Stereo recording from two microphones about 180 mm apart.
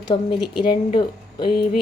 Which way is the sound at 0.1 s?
30° left (ahead or behind).